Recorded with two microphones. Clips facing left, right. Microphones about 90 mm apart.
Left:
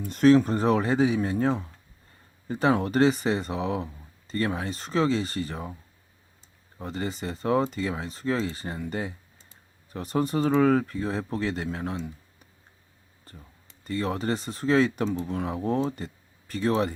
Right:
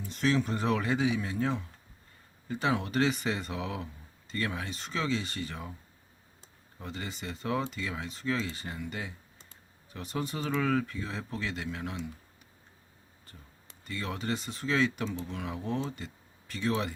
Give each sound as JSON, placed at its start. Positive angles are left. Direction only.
{"t": 0.0, "sound": "speech", "side_deg": 50}
{"t": 6.7, "sound": "speech", "side_deg": 35}
{"t": 13.3, "sound": "speech", "side_deg": 40}